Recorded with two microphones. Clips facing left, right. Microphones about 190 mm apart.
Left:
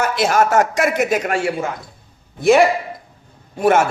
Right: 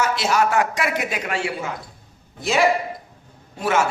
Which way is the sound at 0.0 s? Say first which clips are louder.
Left 3 dB; 50° left (ahead or behind).